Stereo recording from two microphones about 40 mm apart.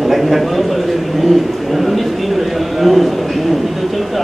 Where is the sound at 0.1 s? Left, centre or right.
Centre.